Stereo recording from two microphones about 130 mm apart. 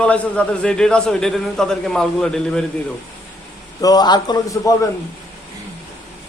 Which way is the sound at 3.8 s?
30° left (ahead or behind).